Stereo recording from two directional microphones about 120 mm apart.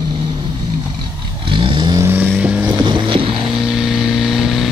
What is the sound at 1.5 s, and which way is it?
Vehicle, 45° right (ahead or behind).